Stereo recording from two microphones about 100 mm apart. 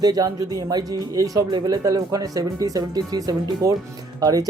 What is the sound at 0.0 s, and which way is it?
Speech, 40° right (ahead or behind).